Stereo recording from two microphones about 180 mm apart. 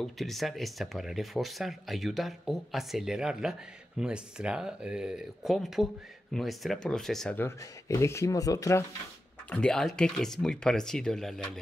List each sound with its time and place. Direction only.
0.0 s speech: centre (ahead or behind)
7.4 s speech: 15° left (ahead or behind)
9.5 s speech: 5° left (ahead or behind)